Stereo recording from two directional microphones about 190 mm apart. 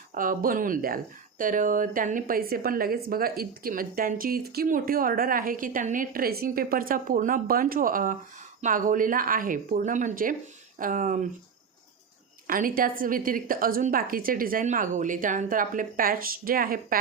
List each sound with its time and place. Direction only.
0.1 s speech: 45° right (ahead or behind)
12.5 s speech: 50° right (ahead or behind)